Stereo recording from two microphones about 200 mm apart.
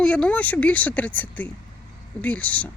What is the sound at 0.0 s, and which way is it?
Speech, 5° left (ahead or behind).